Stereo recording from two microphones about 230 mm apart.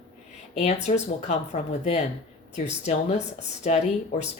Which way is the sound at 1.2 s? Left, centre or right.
Left.